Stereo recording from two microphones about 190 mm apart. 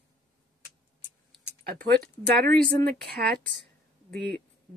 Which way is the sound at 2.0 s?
50° right (ahead or behind).